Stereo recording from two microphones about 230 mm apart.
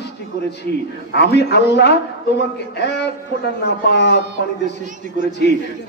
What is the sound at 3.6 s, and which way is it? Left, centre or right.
Speech, left.